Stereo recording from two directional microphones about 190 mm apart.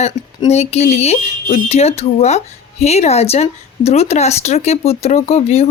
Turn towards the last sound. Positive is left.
turn(degrees=35)  # may be behind; listen again after turning